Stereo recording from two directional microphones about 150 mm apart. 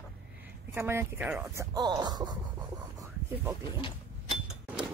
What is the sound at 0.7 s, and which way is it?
Speech, 15° right (ahead or behind).